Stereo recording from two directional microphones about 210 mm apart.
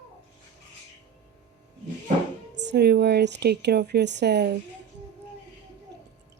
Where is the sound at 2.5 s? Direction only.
55° right (ahead or behind).